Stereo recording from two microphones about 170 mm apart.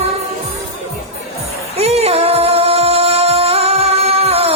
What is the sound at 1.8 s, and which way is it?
Music, 35° right (ahead or behind).